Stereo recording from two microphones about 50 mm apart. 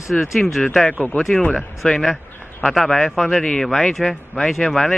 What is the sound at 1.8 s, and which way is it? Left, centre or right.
Speech, centre.